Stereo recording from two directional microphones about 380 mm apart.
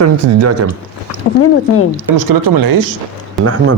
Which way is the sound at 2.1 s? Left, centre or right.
Right.